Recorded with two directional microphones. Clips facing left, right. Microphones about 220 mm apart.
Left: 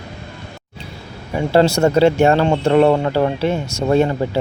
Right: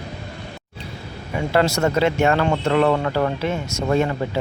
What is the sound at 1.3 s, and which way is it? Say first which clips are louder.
Speech: left 5 dB; 30° left (ahead or behind).